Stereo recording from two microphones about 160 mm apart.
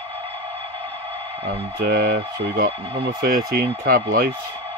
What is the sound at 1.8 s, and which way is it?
Speech, 85° right.